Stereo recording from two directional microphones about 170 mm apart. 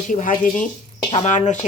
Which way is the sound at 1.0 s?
30° left (ahead or behind).